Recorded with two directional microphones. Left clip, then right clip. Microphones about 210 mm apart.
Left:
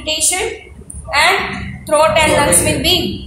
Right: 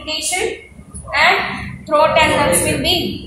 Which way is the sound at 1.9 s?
40° left (ahead or behind).